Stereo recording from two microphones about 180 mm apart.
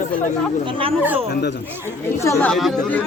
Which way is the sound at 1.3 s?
70° left (ahead or behind).